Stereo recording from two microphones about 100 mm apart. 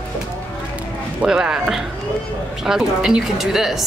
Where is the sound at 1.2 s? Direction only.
10° right (ahead or behind).